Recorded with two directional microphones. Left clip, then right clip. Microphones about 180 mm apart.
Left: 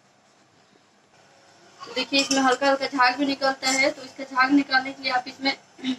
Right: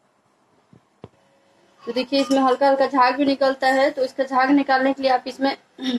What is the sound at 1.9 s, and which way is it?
Speech, 45° right (ahead or behind).